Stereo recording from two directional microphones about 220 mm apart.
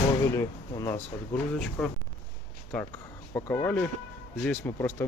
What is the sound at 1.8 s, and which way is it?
Speech, centre (ahead or behind).